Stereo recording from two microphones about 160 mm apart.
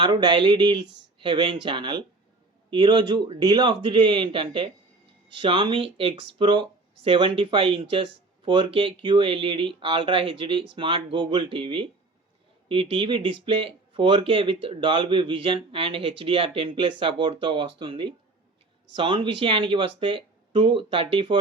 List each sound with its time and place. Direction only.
0.0 s speech: 30° right (ahead or behind)